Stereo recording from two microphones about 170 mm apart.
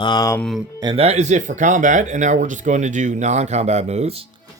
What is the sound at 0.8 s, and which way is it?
Speech, 30° right (ahead or behind).